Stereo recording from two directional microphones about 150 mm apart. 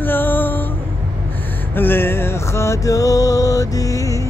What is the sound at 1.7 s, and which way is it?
Music, 15° left (ahead or behind).